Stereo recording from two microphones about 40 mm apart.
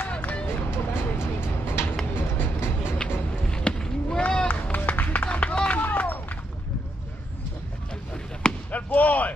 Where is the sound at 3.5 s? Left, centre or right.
Left.